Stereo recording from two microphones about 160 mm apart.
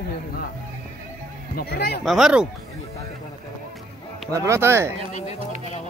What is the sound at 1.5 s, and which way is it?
Speech, 75° left (ahead or behind).